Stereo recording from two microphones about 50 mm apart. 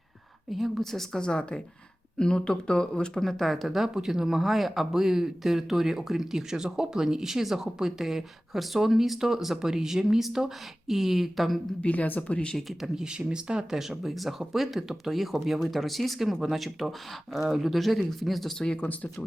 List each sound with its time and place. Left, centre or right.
0.5 s a woman's voice: centre
1.2 s a woman's voice: centre
11.8 s speech: left
12.3 s speech: left
12.5 s speech: centre
13.0 s speech: centre